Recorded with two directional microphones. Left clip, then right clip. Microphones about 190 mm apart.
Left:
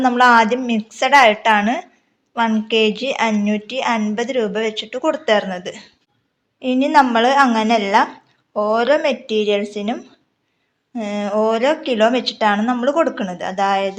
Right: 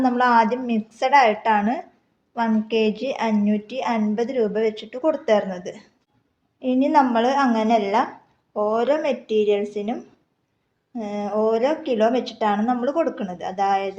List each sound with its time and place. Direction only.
0.0 s a woman's voice: 5° left (ahead or behind)